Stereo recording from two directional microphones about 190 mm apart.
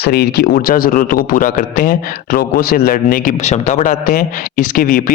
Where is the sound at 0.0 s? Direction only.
55° left (ahead or behind).